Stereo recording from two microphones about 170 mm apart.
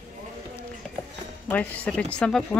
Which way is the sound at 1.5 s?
10° left (ahead or behind).